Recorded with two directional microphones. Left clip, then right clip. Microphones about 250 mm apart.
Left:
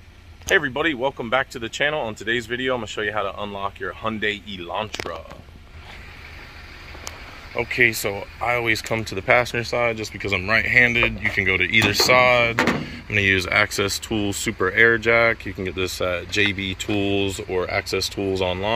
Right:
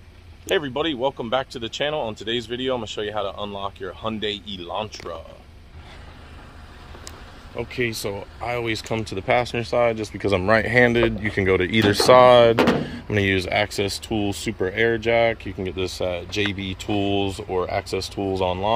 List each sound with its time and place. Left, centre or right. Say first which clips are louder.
0.5 s speech: left 3 dB; centre
7.7 s speech: left 7 dB; centre; by 13.2 s right
13.2 s speech: left 3 dB; centre
17.8 s speech: left 3 dB; right
18.3 s speech: right 2 dB; centre